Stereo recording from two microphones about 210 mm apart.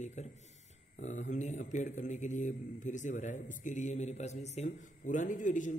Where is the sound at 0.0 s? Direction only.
35° left (ahead or behind).